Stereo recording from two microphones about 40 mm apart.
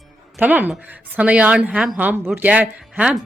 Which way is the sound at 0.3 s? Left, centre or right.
Right.